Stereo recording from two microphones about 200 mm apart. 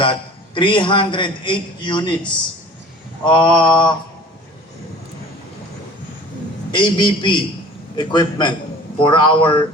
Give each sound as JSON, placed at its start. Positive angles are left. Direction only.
{"t": 0.5, "sound": "a man's voice", "side_deg": 25}
{"t": 3.2, "sound": "a man's voice", "side_deg": 25}
{"t": 6.7, "sound": "a man's voice", "side_deg": 25}